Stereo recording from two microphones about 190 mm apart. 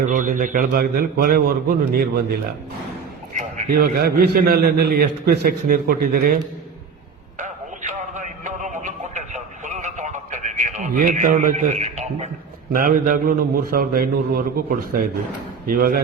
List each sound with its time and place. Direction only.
0.0 s a man's voice: 40° right (ahead or behind)
7.3 s a sound: 40° right (ahead or behind)
12.7 s a man's voice: 45° right (ahead or behind)